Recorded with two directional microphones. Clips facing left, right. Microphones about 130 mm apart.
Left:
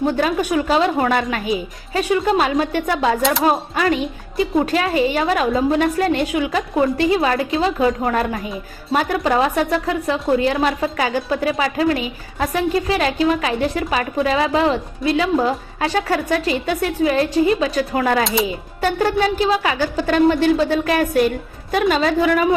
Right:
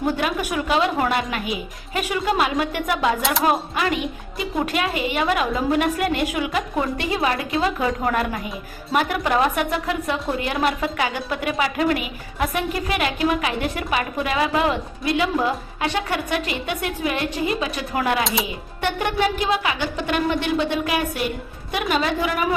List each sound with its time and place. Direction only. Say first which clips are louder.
0.0 s a woman's voice: left 4 dB; 35° left (ahead or behind)
18.2 s speech: left 4 dB; centre (ahead or behind)
18.8 s a woman's voice: left 4 dB; 35° left (ahead or behind)